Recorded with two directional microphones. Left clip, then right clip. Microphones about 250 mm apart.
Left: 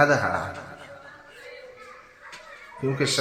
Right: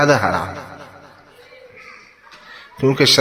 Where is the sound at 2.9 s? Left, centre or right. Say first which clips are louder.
Right 12 dB; right.